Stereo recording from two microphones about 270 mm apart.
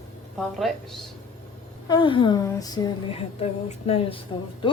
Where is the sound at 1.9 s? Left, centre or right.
Centre.